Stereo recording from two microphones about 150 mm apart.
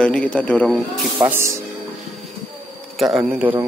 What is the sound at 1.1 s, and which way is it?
Speech, 15° right (ahead or behind).